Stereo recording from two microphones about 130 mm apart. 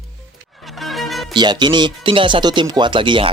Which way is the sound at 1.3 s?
35° right (ahead or behind).